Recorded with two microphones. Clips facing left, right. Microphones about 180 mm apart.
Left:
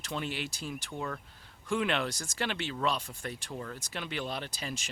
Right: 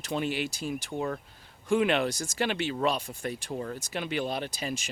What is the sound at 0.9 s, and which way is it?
Speech, 25° right (ahead or behind).